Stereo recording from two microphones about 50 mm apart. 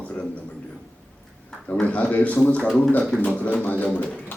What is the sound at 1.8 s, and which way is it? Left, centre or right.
A man's voice, left.